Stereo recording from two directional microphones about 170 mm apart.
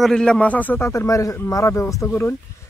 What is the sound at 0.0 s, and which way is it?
Speech, 5° left (ahead or behind).